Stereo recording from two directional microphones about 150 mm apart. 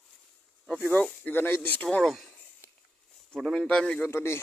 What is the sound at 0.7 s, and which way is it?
Speech, 10° left (ahead or behind).